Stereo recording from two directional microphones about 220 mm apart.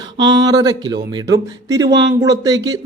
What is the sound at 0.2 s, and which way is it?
Speech, 15° right (ahead or behind).